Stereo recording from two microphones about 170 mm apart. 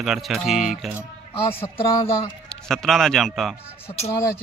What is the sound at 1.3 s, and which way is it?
Speech, 35° left (ahead or behind).